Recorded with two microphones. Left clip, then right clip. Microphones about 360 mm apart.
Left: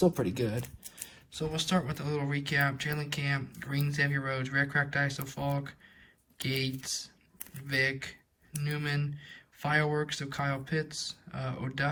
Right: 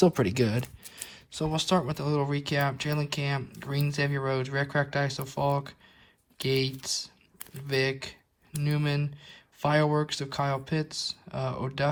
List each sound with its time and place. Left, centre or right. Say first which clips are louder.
0.1 s speech: right 6 dB; centre
1.5 s speech: right 5 dB; centre